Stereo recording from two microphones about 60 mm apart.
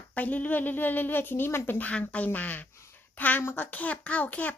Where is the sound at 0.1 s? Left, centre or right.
Left.